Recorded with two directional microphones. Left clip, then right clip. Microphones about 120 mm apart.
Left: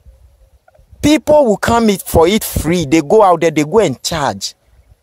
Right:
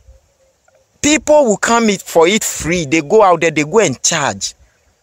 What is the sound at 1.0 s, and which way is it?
Speech, 20° left (ahead or behind).